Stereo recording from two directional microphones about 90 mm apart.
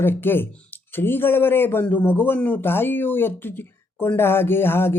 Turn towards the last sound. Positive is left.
turn(degrees=25)  # may be behind; listen again after turning